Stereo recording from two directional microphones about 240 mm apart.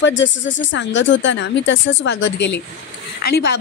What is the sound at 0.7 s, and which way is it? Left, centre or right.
Speech, left.